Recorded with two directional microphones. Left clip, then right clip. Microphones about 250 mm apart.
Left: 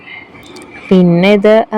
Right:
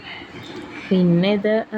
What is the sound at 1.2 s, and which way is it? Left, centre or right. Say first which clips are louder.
Speech: left 15 dB; left.